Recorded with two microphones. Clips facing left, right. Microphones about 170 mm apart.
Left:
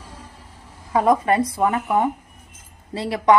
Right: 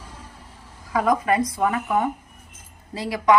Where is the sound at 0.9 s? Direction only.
30° left (ahead or behind).